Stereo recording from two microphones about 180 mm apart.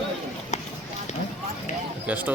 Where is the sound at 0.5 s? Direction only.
40° left (ahead or behind).